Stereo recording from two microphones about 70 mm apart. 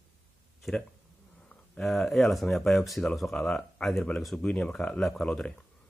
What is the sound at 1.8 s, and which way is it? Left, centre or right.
Speech, centre.